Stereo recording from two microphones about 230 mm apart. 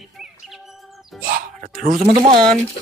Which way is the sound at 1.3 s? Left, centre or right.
Right.